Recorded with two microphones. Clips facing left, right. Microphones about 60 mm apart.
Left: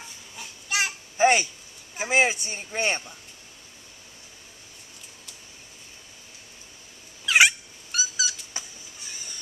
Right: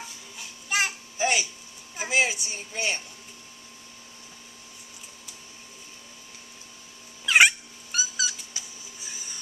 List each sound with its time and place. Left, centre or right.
0.4 s babbling: centre
1.1 s a sound: left
2.0 s a woman's voice: left
7.2 s cat: centre
9.0 s printer: centre